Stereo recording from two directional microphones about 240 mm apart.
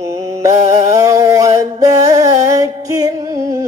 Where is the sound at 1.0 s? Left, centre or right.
Centre.